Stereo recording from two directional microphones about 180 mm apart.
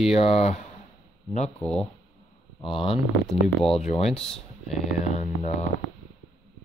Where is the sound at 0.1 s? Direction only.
35° left (ahead or behind).